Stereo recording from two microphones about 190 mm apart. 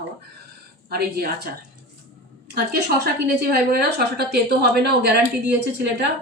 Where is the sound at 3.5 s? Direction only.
55° right (ahead or behind).